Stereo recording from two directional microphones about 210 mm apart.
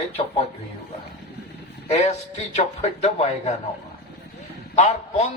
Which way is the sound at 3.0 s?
30° left (ahead or behind).